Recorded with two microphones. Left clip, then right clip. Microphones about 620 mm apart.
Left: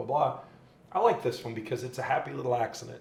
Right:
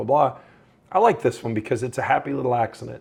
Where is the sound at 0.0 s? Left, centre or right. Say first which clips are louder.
Right 8 dB; right.